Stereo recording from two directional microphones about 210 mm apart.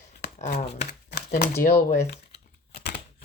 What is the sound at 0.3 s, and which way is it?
Speech, 35° left (ahead or behind).